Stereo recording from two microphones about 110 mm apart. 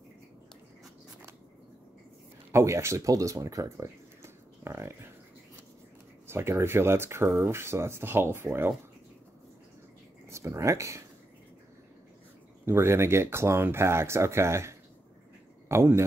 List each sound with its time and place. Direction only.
2.5 s speech: 25° right (ahead or behind)
6.2 s speech: 25° right (ahead or behind)
10.3 s speech: 25° right (ahead or behind)
12.6 s speech: 20° right (ahead or behind)